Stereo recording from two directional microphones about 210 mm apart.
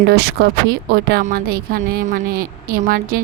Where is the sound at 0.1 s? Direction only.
50° right (ahead or behind).